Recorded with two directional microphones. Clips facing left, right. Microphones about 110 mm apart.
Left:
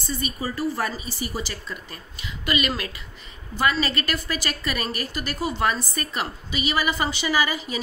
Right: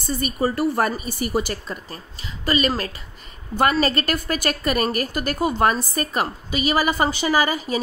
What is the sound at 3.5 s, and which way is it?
A woman's voice, 50° right (ahead or behind).